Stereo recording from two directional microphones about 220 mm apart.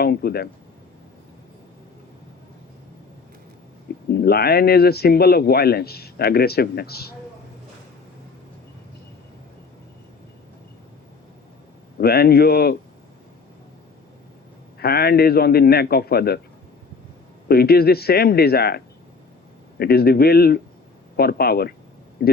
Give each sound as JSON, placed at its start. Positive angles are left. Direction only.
{"t": 0.0, "sound": "speech", "side_deg": 45}
{"t": 4.1, "sound": "speech", "side_deg": 45}
{"t": 11.9, "sound": "speech", "side_deg": 45}
{"t": 14.8, "sound": "speech", "side_deg": 45}
{"t": 17.5, "sound": "speech", "side_deg": 45}
{"t": 19.8, "sound": "speech", "side_deg": 45}